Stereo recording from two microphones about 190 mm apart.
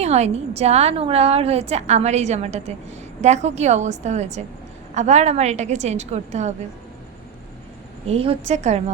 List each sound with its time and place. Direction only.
0.0 s a woman's voice: 35° right (ahead or behind)
8.0 s a woman's voice: 30° right (ahead or behind)